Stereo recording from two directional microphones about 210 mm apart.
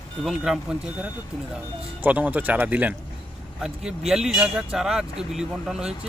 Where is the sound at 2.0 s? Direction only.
5° right (ahead or behind).